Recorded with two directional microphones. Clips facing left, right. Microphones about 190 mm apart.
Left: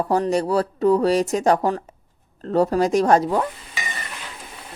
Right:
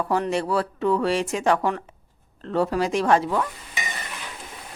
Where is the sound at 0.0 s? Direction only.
35° left (ahead or behind).